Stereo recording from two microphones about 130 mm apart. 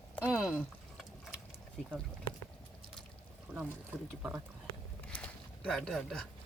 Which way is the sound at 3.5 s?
15° right (ahead or behind).